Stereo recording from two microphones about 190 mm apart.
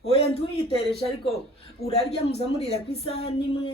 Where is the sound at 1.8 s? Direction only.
30° left (ahead or behind).